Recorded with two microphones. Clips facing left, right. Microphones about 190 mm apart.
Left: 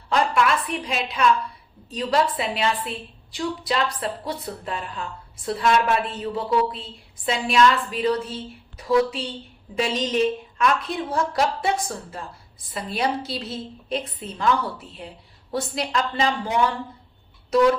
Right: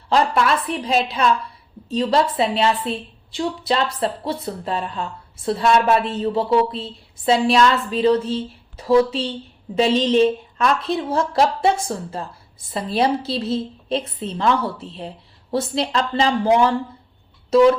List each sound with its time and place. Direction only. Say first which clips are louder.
0.1 s a woman's voice: right 3 dB; 30° right (ahead or behind)